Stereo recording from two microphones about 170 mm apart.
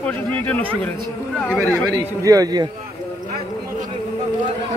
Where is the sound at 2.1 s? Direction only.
20° right (ahead or behind).